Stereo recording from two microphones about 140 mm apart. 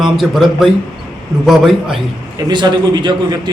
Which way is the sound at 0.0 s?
Centre (ahead or behind).